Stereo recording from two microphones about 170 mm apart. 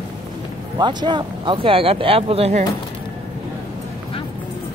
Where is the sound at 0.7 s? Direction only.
25° right (ahead or behind).